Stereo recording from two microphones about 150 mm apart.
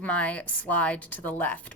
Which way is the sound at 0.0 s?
10° left (ahead or behind).